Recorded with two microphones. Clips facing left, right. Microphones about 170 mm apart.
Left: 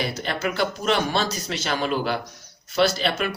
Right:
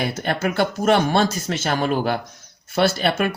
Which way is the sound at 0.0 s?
50° right (ahead or behind).